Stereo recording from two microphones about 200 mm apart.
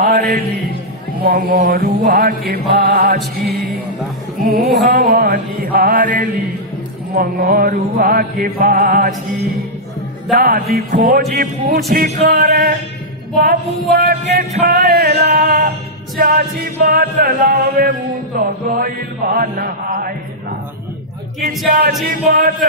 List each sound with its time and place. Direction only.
0.0 s music: 45° right (ahead or behind)
4.5 s music: 50° right (ahead or behind)
21.5 s music: 45° right (ahead or behind)